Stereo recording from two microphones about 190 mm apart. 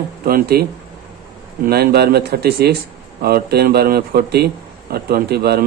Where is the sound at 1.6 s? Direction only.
55° right (ahead or behind).